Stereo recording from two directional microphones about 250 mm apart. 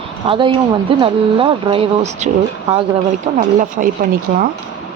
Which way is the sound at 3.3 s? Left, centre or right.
Right.